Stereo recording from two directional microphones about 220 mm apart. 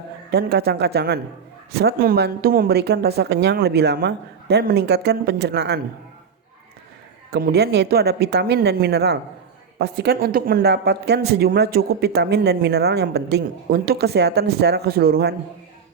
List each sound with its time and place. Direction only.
0.3 s speech: 50° right (ahead or behind)
7.3 s speech: 45° right (ahead or behind)